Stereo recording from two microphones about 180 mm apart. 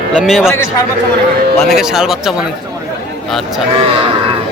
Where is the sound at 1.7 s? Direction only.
Centre (ahead or behind).